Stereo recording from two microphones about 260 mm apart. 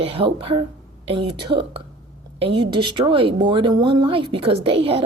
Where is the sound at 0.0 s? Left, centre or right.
Right.